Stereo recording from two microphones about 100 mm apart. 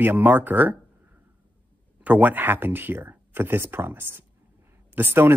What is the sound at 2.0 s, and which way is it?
Speech, 15° right (ahead or behind).